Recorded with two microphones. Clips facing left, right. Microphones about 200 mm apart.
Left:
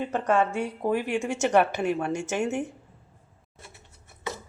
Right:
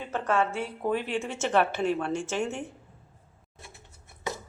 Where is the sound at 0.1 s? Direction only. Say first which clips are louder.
Left 1 dB; 15° left (ahead or behind).